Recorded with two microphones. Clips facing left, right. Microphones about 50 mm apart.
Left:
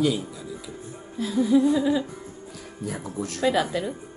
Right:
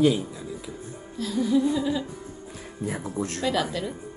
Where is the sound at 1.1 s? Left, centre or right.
Centre.